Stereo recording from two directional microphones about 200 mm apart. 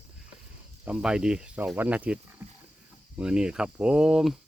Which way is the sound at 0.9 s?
5° right (ahead or behind).